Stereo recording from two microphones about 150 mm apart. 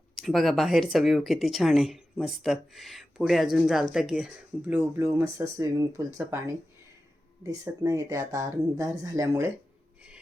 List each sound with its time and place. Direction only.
0.2 s speech: centre (ahead or behind); by 6.4 s 20° right (ahead or behind)
7.6 s speech: 20° right (ahead or behind)